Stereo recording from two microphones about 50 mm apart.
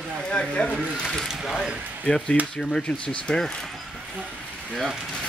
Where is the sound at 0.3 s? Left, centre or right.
Left.